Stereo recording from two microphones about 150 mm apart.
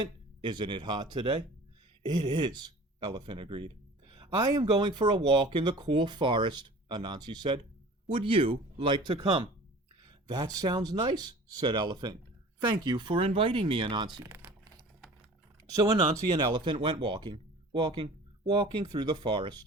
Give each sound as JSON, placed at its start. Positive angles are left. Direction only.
{"t": 0.0, "sound": "speech", "side_deg": -30}
{"t": 14.3, "sound": "crumpling", "side_deg": -20}
{"t": 15.7, "sound": "speech", "side_deg": -25}